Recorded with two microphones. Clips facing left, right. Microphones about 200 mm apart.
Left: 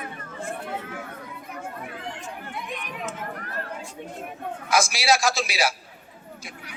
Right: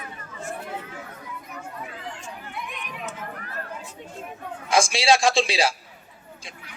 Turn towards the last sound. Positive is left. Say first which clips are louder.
# right 3 dB
turn(degrees=-30)  # may be behind; listen again after turning